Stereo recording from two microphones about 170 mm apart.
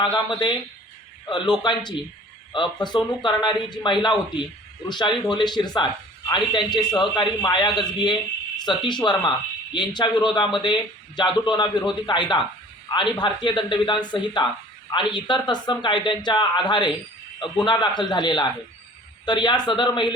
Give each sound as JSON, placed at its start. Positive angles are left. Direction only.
{"t": 0.0, "sound": "a man's voice", "side_deg": 25}